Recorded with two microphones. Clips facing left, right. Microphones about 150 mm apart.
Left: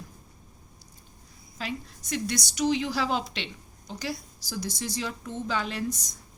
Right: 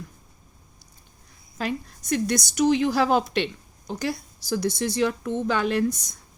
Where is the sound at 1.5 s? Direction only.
50° right (ahead or behind).